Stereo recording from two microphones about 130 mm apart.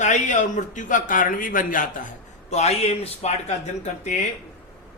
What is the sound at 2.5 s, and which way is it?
Speech, 55° left (ahead or behind).